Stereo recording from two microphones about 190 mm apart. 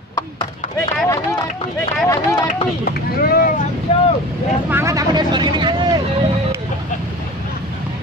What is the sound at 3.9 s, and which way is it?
Vehicle, 30° left (ahead or behind).